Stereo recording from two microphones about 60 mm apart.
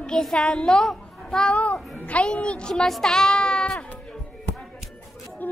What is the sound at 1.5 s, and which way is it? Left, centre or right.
A child's voice, left.